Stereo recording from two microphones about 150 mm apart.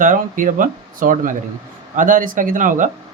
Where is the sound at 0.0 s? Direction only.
60° right (ahead or behind).